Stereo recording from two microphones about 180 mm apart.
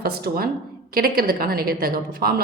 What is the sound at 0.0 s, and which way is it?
A woman's voice, 60° right (ahead or behind).